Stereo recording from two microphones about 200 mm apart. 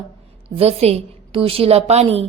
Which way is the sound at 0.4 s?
30° right (ahead or behind).